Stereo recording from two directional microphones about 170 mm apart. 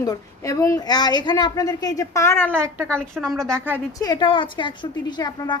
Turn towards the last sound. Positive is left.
turn(degrees=25)  # may be behind; listen again after turning